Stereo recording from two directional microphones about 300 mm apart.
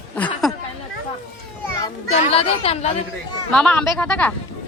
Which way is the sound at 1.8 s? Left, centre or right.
Left.